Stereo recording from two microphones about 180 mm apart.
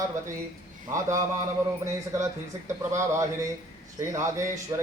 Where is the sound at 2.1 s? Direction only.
15° right (ahead or behind).